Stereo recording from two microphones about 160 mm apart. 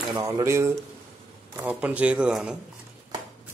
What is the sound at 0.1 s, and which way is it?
A man's voice, 20° right (ahead or behind).